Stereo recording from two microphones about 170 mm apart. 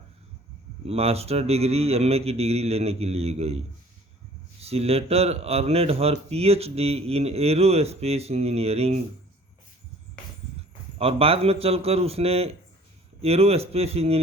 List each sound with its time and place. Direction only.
0.9 s speech: 35° right (ahead or behind)
4.6 s speech: 35° right (ahead or behind)
10.9 s speech: 35° right (ahead or behind)